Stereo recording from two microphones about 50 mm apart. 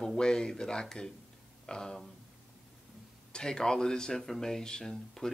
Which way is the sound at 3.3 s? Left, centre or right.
Centre.